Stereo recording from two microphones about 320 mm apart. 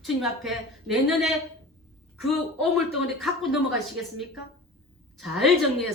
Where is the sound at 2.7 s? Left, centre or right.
Centre.